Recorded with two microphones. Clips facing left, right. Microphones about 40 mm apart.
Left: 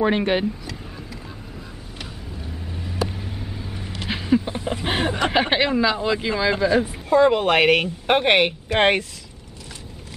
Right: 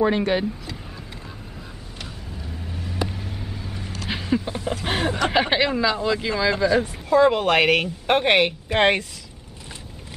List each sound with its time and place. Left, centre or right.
0.0 s speech: left
2.6 s vehicle: centre
4.1 s a sound: centre
4.6 s speech: centre